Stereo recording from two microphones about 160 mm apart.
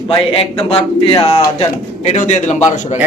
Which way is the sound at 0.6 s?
35° left (ahead or behind).